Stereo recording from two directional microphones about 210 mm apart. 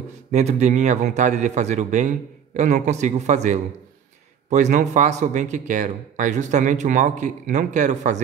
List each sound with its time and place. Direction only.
0.3 s speech: 35° right (ahead or behind)